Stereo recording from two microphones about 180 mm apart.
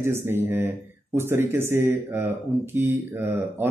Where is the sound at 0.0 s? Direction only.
15° right (ahead or behind).